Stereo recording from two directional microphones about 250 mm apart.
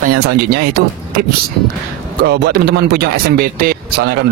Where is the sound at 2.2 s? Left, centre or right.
Right.